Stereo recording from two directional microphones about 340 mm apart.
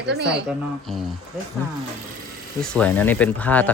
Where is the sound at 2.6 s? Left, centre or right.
Centre.